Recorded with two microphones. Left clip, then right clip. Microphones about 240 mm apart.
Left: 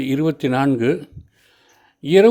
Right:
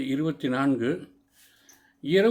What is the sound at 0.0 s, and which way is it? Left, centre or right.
Speech, left.